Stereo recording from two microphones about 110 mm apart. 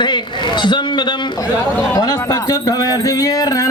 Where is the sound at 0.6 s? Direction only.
45° left (ahead or behind).